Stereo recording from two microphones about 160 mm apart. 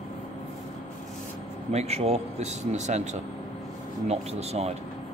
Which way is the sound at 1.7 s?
40° right (ahead or behind).